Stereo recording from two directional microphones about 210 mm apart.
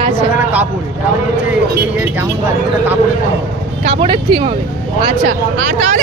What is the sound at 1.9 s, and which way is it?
Speech, 10° right (ahead or behind).